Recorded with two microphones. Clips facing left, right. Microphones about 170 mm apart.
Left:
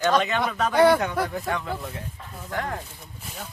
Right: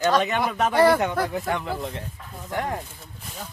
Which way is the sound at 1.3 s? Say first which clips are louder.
Right 2 dB; 20° right (ahead or behind).